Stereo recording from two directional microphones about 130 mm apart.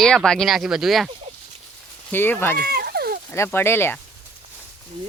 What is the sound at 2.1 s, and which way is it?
Speech, 15° left (ahead or behind).